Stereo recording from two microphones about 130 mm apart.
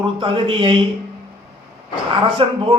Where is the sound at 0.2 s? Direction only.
45° right (ahead or behind).